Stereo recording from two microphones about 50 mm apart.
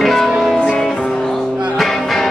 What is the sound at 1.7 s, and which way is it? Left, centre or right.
Music, centre.